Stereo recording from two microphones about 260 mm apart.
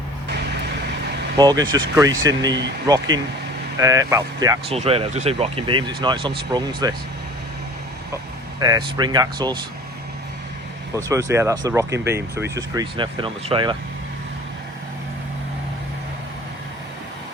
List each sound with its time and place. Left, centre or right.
1.4 s speech: centre
8.6 s speech: centre
10.9 s speech: centre